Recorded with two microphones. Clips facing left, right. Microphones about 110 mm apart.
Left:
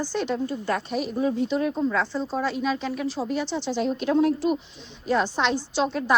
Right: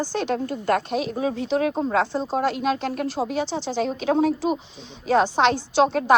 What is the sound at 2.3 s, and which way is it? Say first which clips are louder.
A woman's voice: right 3 dB; 65° right (ahead or behind).